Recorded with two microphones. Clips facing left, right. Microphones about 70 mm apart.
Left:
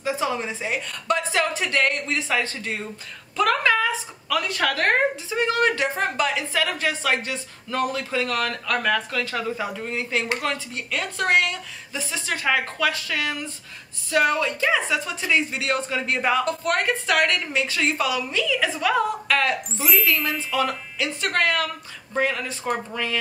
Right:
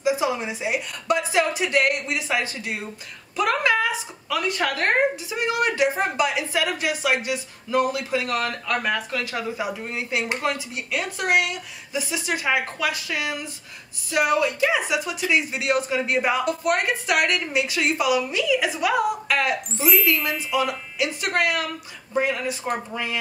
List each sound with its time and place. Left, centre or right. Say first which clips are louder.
0.0 s speech: right 2 dB; centre
10.2 s speech: right 1 dB; right
10.9 s speech: left 1 dB; centre
19.7 s speech: right 2 dB; centre
20.1 s speech: right 1 dB; centre